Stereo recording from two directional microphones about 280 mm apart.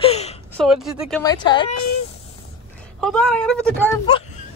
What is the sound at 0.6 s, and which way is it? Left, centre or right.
Speech, centre.